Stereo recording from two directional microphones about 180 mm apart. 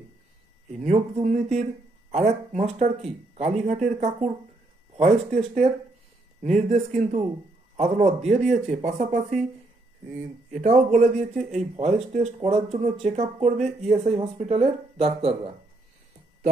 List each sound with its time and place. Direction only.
0.8 s speech: 40° right (ahead or behind)
10.6 s speech: 40° right (ahead or behind)